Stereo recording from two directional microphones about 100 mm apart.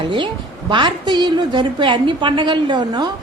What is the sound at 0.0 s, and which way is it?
A woman's voice, 55° right (ahead or behind).